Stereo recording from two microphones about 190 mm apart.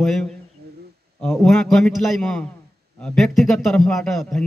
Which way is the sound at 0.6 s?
60° right (ahead or behind).